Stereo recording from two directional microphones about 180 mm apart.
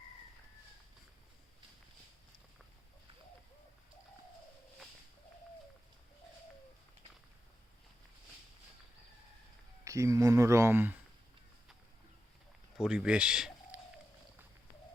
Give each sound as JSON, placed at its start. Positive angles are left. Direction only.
{"t": 9.8, "sound": "speech", "side_deg": -15}
{"t": 12.7, "sound": "speech", "side_deg": -5}